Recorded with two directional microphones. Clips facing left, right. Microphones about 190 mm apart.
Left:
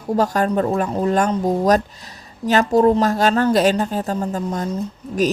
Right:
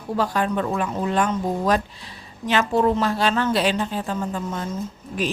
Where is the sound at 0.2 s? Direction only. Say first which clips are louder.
Left 4 dB; 40° left (ahead or behind).